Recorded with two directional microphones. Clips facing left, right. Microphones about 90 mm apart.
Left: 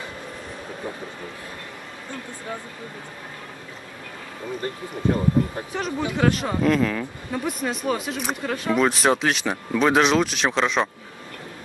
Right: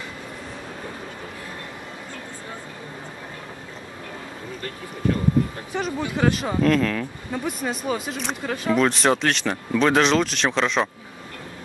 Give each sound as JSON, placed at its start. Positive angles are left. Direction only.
{"t": 4.6, "sound": "speech", "side_deg": 25}
{"t": 5.8, "sound": "speech", "side_deg": 0}